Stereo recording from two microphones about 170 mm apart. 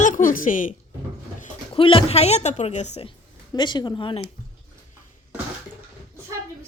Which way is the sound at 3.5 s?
25° left (ahead or behind).